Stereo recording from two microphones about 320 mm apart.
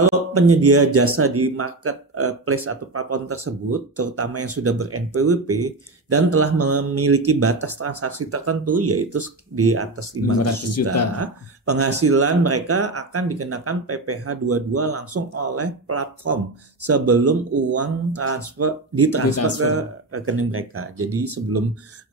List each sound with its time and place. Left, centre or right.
0.1 s speech: right
10.4 s speech: left
11.1 s speech: right